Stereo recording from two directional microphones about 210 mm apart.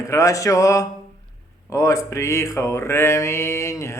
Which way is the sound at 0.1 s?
15° left (ahead or behind).